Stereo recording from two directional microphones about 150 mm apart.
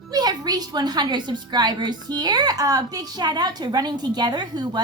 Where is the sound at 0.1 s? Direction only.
25° right (ahead or behind).